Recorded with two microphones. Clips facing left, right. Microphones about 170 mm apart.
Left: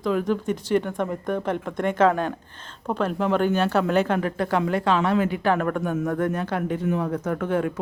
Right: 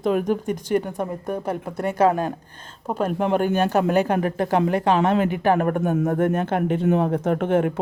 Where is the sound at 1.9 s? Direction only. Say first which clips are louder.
Right 1 dB; 10° right (ahead or behind).